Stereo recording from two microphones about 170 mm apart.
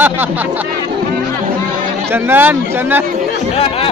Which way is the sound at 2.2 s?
10° right (ahead or behind).